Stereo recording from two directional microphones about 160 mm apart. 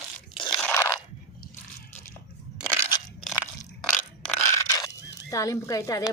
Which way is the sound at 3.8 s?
5° left (ahead or behind).